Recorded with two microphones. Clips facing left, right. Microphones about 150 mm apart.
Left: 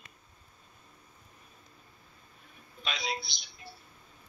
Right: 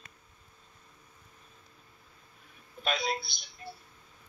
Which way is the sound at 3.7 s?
50° right (ahead or behind).